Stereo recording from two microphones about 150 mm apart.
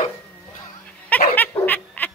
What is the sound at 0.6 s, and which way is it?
Snicker, 10° left (ahead or behind).